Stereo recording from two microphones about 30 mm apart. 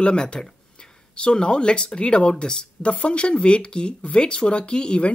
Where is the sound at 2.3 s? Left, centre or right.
Centre.